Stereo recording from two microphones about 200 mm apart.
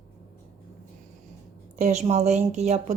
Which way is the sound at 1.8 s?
35° right (ahead or behind).